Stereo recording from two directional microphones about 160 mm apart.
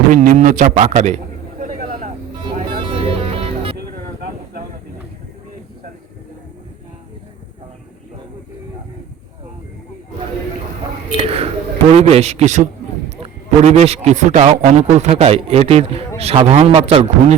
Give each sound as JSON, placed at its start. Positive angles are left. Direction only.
{"t": 0.1, "sound": "a man's voice", "side_deg": -55}
{"t": 2.7, "sound": "music", "side_deg": -35}
{"t": 11.2, "sound": "a sound", "side_deg": -35}
{"t": 11.9, "sound": "a man's voice", "side_deg": -40}
{"t": 13.7, "sound": "a man's voice", "side_deg": -40}